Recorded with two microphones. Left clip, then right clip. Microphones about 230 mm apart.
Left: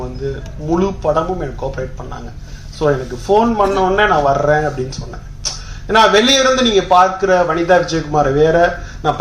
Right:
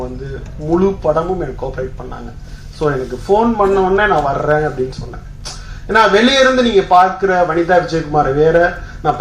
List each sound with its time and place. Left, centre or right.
0.7 s a man's voice: left
2.7 s a man's voice: left